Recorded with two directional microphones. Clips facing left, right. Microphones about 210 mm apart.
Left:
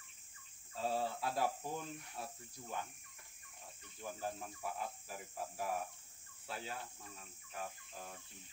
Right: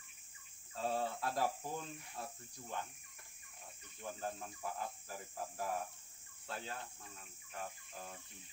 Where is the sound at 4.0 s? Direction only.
5° left (ahead or behind).